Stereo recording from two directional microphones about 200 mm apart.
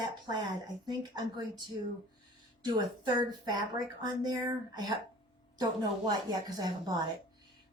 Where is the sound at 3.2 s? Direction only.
20° right (ahead or behind).